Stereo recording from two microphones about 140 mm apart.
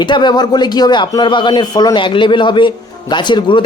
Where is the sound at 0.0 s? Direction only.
35° left (ahead or behind).